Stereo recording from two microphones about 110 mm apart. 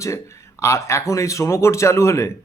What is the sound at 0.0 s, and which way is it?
A man's voice, 25° left (ahead or behind).